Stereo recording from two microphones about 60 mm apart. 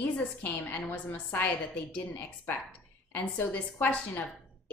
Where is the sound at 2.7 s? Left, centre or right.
Left.